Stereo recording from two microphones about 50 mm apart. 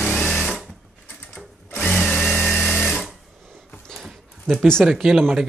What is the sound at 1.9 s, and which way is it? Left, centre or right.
Drill, centre.